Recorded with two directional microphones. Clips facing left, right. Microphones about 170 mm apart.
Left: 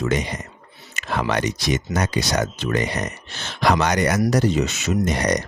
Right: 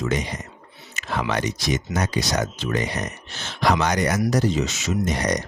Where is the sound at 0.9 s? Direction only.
65° left (ahead or behind).